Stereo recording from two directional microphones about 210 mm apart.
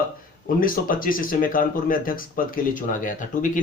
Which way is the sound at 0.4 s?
40° left (ahead or behind).